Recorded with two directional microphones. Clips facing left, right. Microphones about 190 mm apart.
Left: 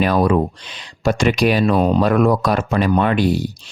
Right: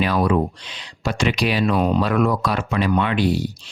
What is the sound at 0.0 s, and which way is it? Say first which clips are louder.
Speech: left 3 dB; 45° left (ahead or behind).